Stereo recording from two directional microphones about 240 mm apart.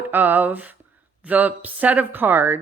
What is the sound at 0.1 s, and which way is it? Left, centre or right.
A woman's voice, centre.